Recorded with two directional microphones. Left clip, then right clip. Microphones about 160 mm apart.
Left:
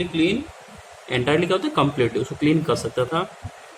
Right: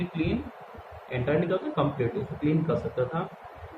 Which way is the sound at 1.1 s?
50° left (ahead or behind).